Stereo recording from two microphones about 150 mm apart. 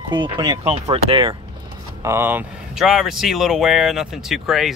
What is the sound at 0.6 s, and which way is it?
Speech, 40° right (ahead or behind).